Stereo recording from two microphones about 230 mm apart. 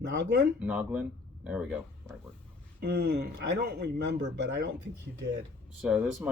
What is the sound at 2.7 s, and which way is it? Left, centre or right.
Speech, right.